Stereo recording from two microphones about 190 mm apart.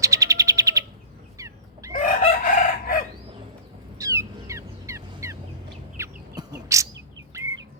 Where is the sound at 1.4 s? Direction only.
15° right (ahead or behind).